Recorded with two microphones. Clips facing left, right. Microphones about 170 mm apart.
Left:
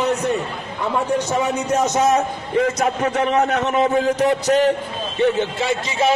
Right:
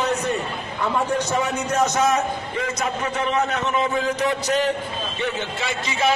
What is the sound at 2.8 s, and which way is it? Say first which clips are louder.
A man's voice: left 5 dB; 60° left (ahead or behind).